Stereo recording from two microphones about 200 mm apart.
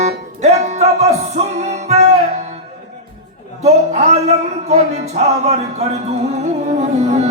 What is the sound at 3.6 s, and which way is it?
Speech, 35° right (ahead or behind).